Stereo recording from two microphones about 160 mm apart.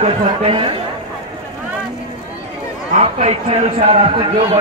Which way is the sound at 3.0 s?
40° right (ahead or behind).